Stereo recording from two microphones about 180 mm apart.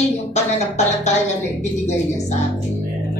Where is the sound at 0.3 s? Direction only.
40° left (ahead or behind).